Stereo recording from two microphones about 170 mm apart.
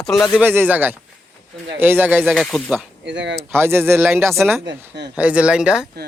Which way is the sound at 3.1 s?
90° right.